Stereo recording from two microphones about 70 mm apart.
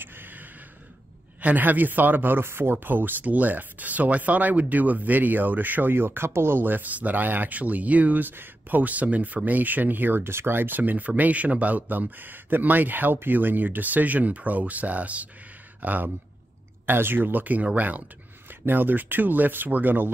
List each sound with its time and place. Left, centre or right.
0.0 s gasp: right
1.4 s speech: right